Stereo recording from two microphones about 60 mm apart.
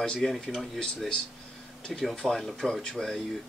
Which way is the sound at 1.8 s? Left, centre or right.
Centre.